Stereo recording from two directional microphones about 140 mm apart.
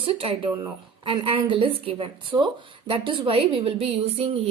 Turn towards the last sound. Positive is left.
turn(degrees=-45)  # may be behind; listen again after turning